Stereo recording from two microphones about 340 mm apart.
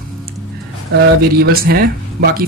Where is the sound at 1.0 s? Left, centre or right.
Right.